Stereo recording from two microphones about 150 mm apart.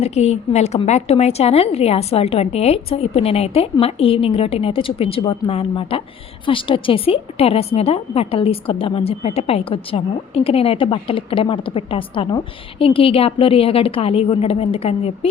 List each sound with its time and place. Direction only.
0.0 s a woman's voice: 45° left (ahead or behind)